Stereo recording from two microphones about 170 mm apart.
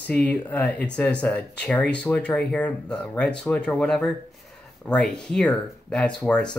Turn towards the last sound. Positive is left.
turn(degrees=5)  # may be behind; listen again after turning